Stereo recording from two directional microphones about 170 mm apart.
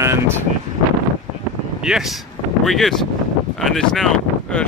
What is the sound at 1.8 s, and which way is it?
Speech, centre (ahead or behind).